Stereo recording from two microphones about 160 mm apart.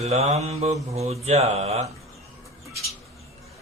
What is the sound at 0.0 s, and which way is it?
Mantra, 40° right (ahead or behind).